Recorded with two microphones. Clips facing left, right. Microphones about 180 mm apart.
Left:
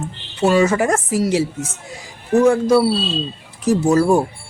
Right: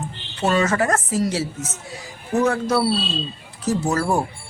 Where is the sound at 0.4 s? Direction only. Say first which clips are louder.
Left 4 dB; 10° left (ahead or behind).